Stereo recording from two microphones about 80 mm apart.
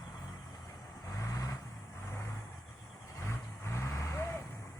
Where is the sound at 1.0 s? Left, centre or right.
Left.